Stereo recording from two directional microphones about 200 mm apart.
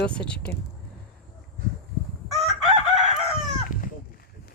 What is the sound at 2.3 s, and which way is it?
Chicken, centre (ahead or behind).